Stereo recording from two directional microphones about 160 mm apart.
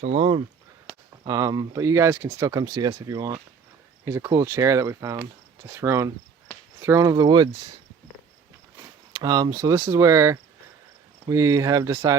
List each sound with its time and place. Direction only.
0.0 s speech: 40° right (ahead or behind)
1.2 s speech: 25° right (ahead or behind)
9.1 s speech: 25° right (ahead or behind)